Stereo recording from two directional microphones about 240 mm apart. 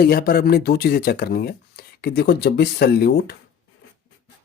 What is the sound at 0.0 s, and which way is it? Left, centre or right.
Speech, left.